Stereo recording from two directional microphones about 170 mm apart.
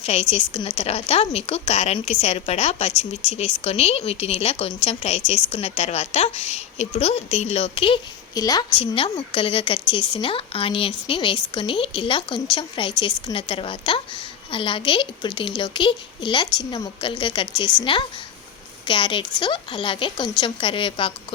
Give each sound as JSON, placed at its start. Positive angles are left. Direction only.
{"t": 0.0, "sound": "a woman's voice", "side_deg": 40}
{"t": 8.4, "sound": "a woman's voice", "side_deg": 20}
{"t": 8.7, "sound": "a woman's voice", "side_deg": 35}